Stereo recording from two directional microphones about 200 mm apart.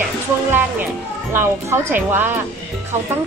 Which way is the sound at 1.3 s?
10° right (ahead or behind).